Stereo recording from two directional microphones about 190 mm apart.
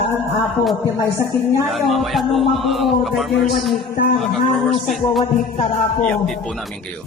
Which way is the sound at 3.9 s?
55° left (ahead or behind).